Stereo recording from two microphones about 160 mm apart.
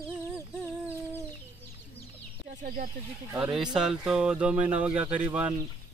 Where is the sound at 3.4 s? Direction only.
5° right (ahead or behind).